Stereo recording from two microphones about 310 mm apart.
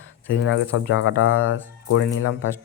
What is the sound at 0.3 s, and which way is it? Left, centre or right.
Speech, left.